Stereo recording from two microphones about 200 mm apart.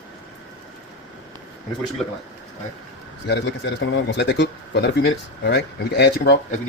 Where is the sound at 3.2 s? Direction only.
60° left (ahead or behind).